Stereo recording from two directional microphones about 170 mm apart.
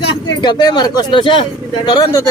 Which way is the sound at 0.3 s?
25° left (ahead or behind).